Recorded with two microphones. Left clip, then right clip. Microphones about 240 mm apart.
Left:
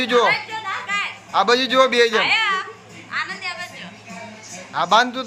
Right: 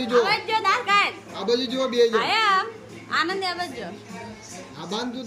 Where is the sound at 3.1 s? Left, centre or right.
Right.